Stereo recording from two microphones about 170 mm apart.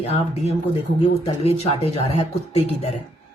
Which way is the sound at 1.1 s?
40° left (ahead or behind).